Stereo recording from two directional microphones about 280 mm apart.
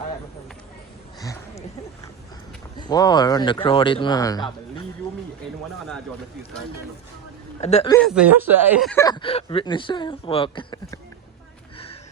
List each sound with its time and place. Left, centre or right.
1.2 s a sound: centre
2.7 s speech: centre
7.6 s speech: left
7.9 s speech: centre
9.0 s speech: centre